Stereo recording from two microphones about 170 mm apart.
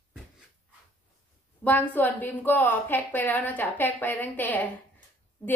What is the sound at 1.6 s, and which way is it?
A woman's voice, 10° left (ahead or behind).